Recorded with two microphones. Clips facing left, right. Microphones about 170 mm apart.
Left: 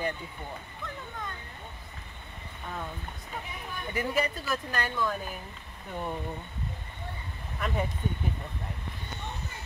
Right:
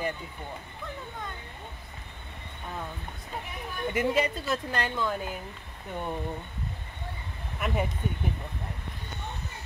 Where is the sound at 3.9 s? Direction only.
20° right (ahead or behind).